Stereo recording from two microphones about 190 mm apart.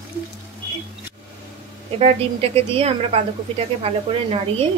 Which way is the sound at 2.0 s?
30° right (ahead or behind).